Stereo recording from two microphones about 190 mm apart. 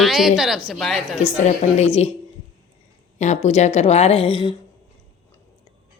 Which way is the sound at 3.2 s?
40° left (ahead or behind).